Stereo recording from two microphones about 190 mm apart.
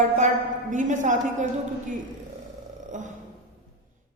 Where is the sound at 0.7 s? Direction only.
40° right (ahead or behind).